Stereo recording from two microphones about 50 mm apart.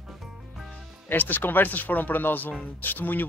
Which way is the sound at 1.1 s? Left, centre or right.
Left.